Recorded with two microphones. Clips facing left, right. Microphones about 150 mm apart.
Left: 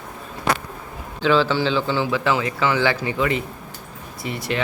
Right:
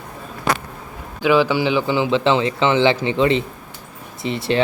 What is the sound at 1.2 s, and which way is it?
Speech, 15° right (ahead or behind).